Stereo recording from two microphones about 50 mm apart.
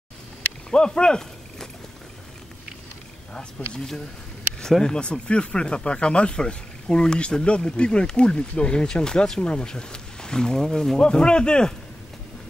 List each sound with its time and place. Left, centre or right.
0.7 s speech: centre
3.3 s speech: centre